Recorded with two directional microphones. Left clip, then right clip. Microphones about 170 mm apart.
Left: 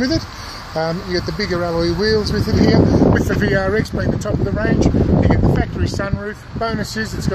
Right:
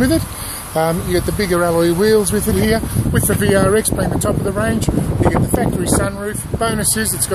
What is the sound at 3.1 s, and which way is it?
Speech, 10° right (ahead or behind).